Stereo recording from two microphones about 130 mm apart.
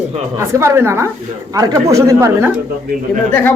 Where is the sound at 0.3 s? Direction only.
20° right (ahead or behind).